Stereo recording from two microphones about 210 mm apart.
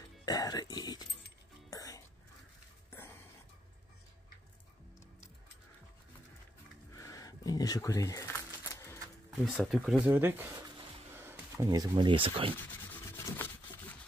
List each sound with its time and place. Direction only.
0.2 s music: 15° left (ahead or behind)
1.7 s throat clearing: 15° left (ahead or behind)
6.9 s a sound: 15° left (ahead or behind)
9.4 s speech: centre (ahead or behind); by 12.5 s 25° right (ahead or behind)
12.5 s rub: 10° left (ahead or behind)